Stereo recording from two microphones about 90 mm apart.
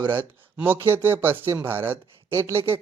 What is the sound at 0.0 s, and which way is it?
A man's voice, 25° right (ahead or behind).